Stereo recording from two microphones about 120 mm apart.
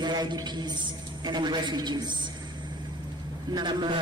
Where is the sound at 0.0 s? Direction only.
35° right (ahead or behind).